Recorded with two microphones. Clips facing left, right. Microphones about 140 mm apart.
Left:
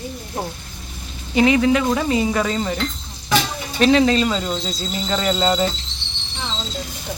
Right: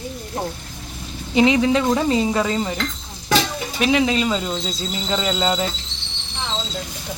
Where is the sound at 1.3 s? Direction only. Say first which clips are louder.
Even; 20° right (ahead or behind).